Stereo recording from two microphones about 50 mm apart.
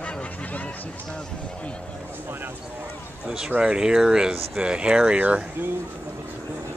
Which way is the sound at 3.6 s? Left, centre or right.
Centre.